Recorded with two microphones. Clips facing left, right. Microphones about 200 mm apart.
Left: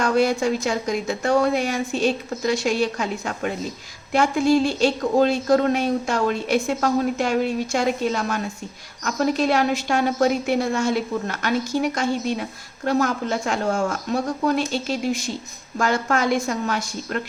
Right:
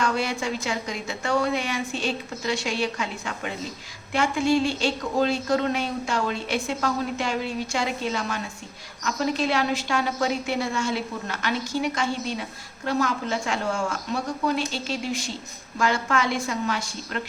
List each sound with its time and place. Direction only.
0.0 s a woman's voice: 40° left (ahead or behind)